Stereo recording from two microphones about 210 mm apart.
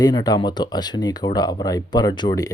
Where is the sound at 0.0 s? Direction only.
20° left (ahead or behind).